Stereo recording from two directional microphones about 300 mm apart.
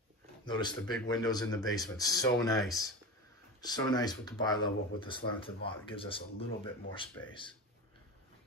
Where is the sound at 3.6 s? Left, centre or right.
Centre.